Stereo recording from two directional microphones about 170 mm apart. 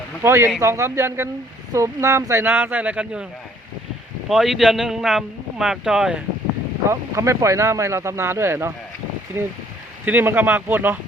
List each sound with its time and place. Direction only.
0.2 s speech: 15° right (ahead or behind)
4.3 s speech: centre (ahead or behind)
6.9 s speech: 15° right (ahead or behind)